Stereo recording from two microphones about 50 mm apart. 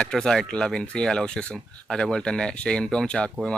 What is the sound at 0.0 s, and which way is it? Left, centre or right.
Speech, centre.